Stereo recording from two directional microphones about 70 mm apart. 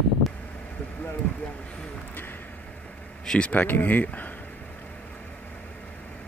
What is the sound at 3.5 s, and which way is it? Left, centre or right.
Speech, left.